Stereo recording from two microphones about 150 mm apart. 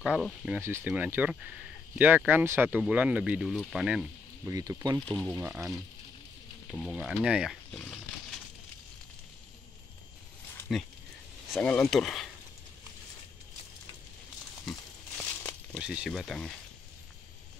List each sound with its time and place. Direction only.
0.0 s speech: 5° right (ahead or behind)
4.5 s speech: 20° right (ahead or behind)
6.7 s speech: 5° right (ahead or behind)
7.7 s speech: 5° left (ahead or behind)
11.6 s speech: 10° left (ahead or behind)
14.7 s a sound: 5° left (ahead or behind)
15.8 s speech: 5° right (ahead or behind)